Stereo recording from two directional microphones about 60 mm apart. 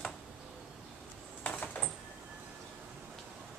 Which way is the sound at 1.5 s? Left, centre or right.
Left.